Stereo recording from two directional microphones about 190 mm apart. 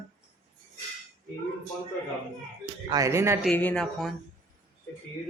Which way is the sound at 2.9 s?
15° right (ahead or behind).